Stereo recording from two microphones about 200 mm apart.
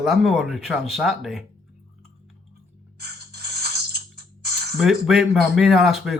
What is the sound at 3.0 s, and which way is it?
Music, 50° right (ahead or behind).